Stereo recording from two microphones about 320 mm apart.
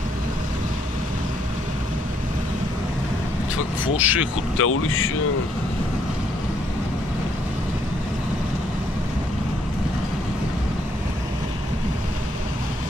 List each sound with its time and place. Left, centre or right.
3.9 s speech: centre
4.6 s speech: left